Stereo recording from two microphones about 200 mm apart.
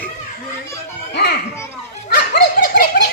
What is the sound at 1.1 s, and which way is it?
Children playing, 55° left (ahead or behind).